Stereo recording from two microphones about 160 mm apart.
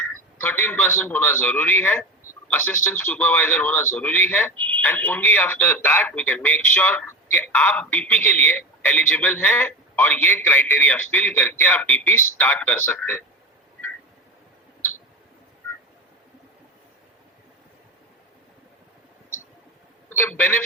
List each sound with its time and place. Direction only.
0.1 s speech: 10° left (ahead or behind)
20.1 s speech: 15° left (ahead or behind)